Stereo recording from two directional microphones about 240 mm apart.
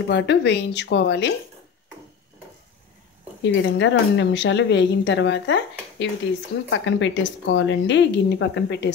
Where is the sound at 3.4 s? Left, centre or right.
Left.